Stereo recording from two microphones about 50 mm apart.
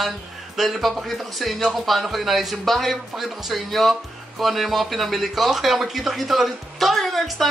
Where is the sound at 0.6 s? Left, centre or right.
Centre.